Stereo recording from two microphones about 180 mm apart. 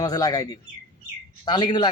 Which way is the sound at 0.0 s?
20° left (ahead or behind).